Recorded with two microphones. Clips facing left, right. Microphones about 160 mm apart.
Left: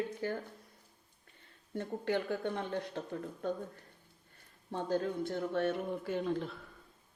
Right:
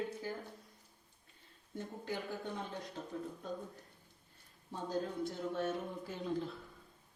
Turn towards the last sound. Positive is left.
turn(degrees=65)  # may be behind; listen again after turning